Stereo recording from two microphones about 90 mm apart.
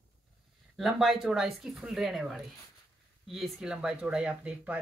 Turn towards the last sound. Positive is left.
turn(degrees=-15)  # may be behind; listen again after turning